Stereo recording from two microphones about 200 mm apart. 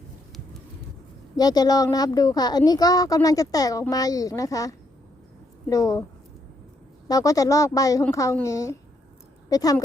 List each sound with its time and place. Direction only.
1.4 s speech: 20° left (ahead or behind)
7.1 s speech: 15° left (ahead or behind)